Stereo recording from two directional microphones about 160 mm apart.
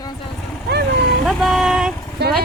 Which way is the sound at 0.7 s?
90° right.